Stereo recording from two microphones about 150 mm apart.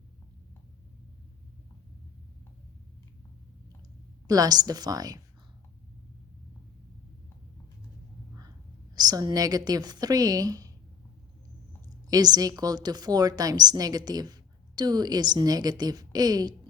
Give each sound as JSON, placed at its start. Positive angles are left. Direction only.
{"t": 4.3, "sound": "a woman's voice", "side_deg": -25}
{"t": 9.0, "sound": "a woman's voice", "side_deg": -25}
{"t": 12.0, "sound": "a woman's voice", "side_deg": -25}